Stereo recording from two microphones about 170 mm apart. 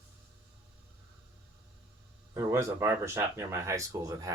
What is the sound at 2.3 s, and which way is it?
Speech, 15° right (ahead or behind).